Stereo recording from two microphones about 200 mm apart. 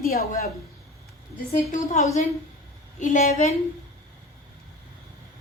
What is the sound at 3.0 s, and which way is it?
Speech, 40° left (ahead or behind).